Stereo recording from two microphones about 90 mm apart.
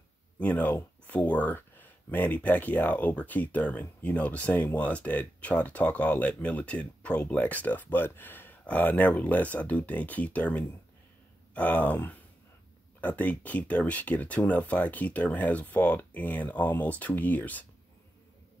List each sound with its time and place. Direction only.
0.4 s speech: 15° left (ahead or behind)